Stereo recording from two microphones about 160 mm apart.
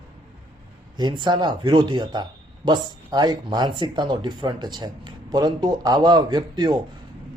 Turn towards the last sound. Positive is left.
turn(degrees=-25)  # may be behind; listen again after turning